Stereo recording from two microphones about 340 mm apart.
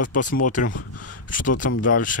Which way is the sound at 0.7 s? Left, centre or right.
Left.